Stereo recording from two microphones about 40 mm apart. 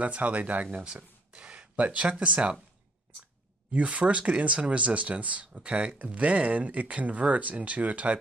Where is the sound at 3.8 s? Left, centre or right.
Right.